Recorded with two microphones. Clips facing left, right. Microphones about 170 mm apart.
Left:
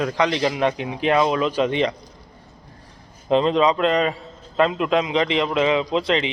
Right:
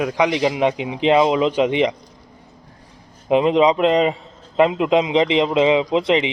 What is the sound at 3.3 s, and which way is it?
A man's voice, 15° right (ahead or behind).